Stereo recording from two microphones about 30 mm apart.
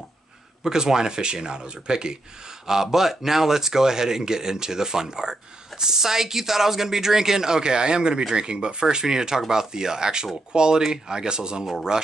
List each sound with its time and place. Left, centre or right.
0.7 s speech: centre
2.6 s speech: centre